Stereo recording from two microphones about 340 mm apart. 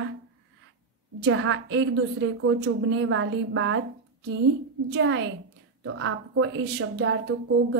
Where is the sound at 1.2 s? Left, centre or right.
Right.